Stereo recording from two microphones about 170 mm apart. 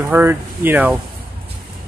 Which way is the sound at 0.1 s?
10° right (ahead or behind).